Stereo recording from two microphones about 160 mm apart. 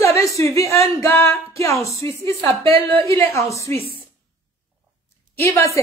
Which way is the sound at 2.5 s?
35° right (ahead or behind).